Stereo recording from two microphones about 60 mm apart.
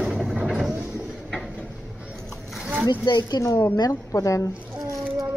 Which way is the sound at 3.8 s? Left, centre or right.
Left.